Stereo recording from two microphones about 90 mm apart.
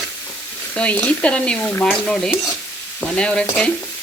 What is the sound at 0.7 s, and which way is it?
Frying, 15° left (ahead or behind).